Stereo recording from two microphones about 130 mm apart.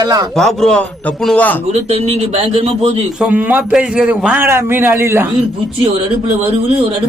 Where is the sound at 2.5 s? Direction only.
45° right (ahead or behind).